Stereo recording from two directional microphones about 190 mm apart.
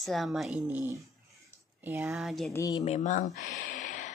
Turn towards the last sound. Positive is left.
turn(degrees=40)  # may be behind; listen again after turning